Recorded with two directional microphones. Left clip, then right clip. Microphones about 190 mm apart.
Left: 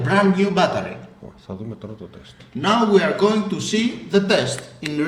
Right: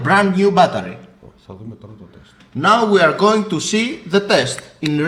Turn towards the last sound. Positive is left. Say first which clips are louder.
# right 4 dB
turn(degrees=15)  # may be behind; listen again after turning